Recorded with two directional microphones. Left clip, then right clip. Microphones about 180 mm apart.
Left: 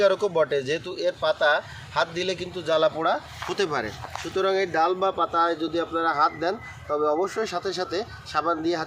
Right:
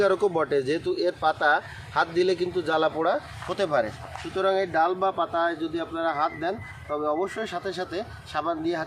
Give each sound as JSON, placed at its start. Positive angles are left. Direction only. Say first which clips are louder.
{"t": 0.0, "sound": "speech", "louder": "left 2 dB", "side_deg": -35}